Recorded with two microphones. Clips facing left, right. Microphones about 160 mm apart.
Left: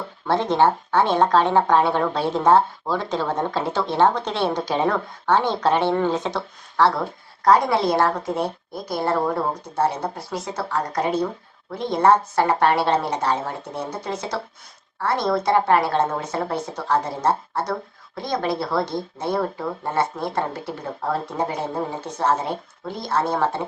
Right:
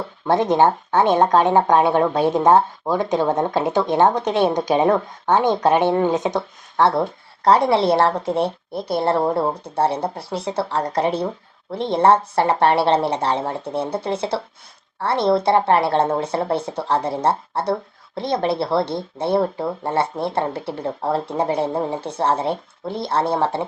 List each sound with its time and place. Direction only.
0.3 s a woman's voice: 15° right (ahead or behind)